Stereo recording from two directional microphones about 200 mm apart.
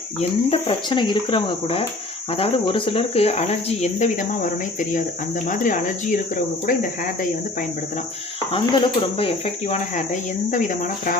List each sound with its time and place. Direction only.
0.2 s speech: 25° left (ahead or behind)
5.5 s speech: 40° left (ahead or behind)
8.5 s speech: 25° left (ahead or behind)